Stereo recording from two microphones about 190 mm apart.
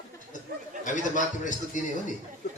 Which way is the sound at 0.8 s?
40° left (ahead or behind).